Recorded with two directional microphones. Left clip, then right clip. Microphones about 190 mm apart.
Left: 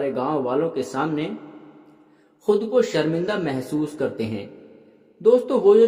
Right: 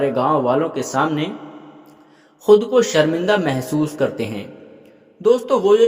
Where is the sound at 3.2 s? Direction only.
20° right (ahead or behind).